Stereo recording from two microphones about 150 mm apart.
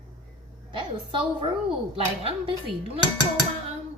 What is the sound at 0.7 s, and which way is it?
A woman's voice, 35° right (ahead or behind).